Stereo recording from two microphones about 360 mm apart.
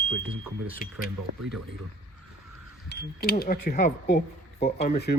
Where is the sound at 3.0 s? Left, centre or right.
Left.